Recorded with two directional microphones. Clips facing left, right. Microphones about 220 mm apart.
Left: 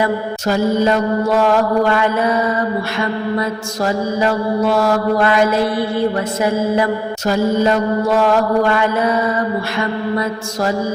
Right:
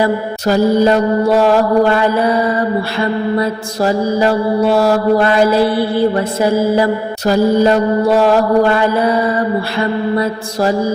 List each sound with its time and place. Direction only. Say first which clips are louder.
0.0 s mantra: right 3 dB; 35° right (ahead or behind)